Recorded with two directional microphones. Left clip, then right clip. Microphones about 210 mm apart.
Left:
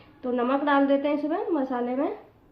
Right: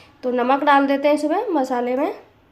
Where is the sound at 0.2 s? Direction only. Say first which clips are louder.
Right 7 dB; 55° right (ahead or behind).